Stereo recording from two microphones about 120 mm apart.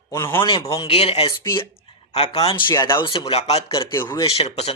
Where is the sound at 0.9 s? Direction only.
60° left (ahead or behind).